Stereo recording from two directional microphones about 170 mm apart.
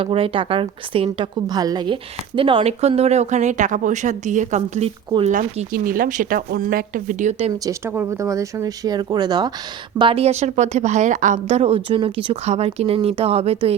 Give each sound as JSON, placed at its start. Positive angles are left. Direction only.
{"t": 0.0, "sound": "a woman's voice", "side_deg": -30}
{"t": 7.6, "sound": "a woman's voice", "side_deg": -15}